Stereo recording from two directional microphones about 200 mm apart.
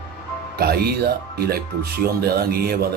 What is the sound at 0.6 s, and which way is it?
Speech, 50° right (ahead or behind).